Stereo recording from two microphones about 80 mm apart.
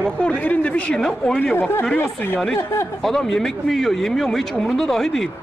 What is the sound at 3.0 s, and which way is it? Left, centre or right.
Speech, centre.